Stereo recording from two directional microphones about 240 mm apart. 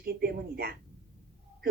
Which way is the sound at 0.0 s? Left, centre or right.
Right.